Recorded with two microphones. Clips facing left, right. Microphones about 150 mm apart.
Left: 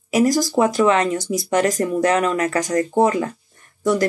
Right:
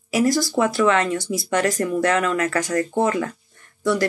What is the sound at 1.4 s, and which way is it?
Speech, 40° left (ahead or behind).